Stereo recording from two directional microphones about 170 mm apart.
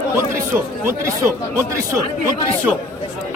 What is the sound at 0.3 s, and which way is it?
A man's voice, 15° right (ahead or behind).